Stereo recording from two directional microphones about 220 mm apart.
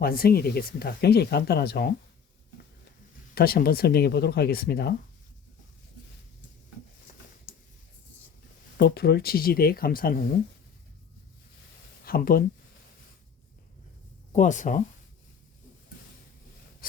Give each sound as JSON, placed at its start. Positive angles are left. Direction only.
{"t": 0.0, "sound": "speech", "side_deg": 45}
{"t": 3.3, "sound": "speech", "side_deg": 45}
{"t": 8.8, "sound": "speech", "side_deg": 45}
{"t": 12.0, "sound": "speech", "side_deg": 40}
{"t": 14.3, "sound": "speech", "side_deg": 35}